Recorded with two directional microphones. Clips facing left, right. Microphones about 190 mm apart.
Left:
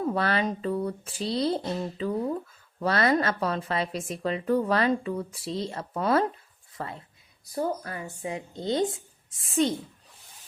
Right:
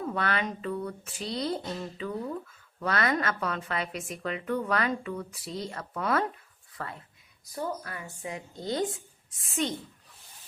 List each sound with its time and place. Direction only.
0.0 s a woman's voice: 35° left (ahead or behind)
9.4 s a woman's voice: 35° left (ahead or behind)